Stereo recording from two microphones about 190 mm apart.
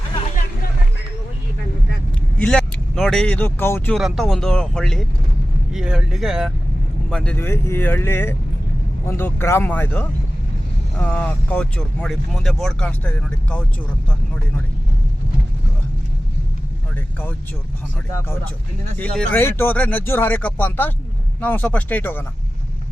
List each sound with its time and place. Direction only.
2.4 s speech: 5° left (ahead or behind)
3.9 s speech: centre (ahead or behind)
18.9 s speech: 10° left (ahead or behind)